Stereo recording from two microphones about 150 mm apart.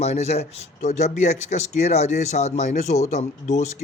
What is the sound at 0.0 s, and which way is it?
Speech, 45° left (ahead or behind).